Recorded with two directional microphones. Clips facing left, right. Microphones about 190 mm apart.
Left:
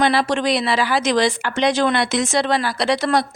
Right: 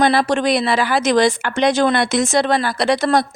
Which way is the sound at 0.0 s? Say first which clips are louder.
Right 2 dB; 45° right (ahead or behind).